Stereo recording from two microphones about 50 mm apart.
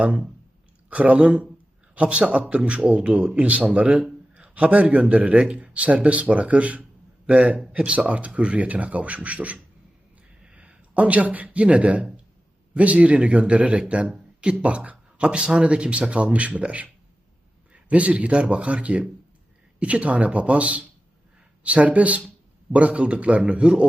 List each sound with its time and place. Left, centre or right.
0.0 s a man's voice: right